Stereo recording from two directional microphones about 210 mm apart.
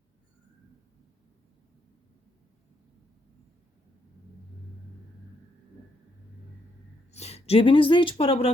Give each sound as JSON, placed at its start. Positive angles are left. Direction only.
{"t": 7.1, "sound": "speech", "side_deg": 30}